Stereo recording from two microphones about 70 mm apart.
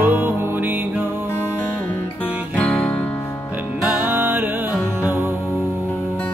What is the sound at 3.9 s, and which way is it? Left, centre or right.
Music, right.